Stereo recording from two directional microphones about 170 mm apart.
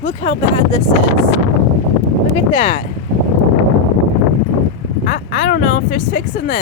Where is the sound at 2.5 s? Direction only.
35° left (ahead or behind).